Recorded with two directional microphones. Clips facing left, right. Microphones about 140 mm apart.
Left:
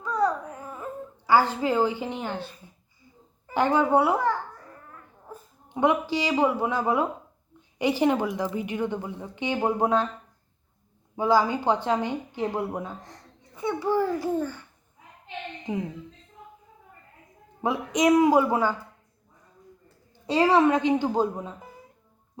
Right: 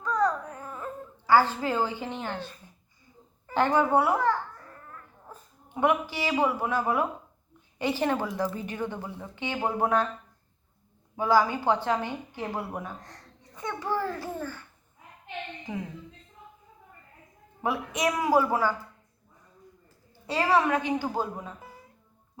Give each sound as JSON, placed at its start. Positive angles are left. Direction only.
{"t": 0.0, "sound": "babbling", "side_deg": 10}
{"t": 1.3, "sound": "a woman's voice", "side_deg": 15}
{"t": 3.4, "sound": "babbling", "side_deg": 15}
{"t": 5.3, "sound": "a woman's voice", "side_deg": 20}
{"t": 11.2, "sound": "a woman's voice", "side_deg": 15}
{"t": 17.6, "sound": "a woman's voice", "side_deg": 20}
{"t": 20.2, "sound": "a woman's voice", "side_deg": 20}